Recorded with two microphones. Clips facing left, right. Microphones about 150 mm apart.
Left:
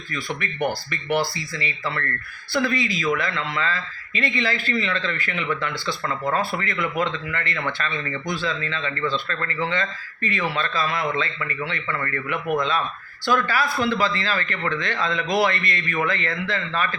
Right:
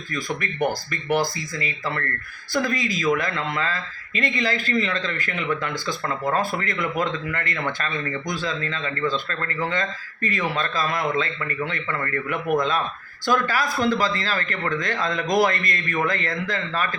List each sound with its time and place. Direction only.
0.1 s speech: 40° right (ahead or behind)
10.5 s speech: 45° right (ahead or behind)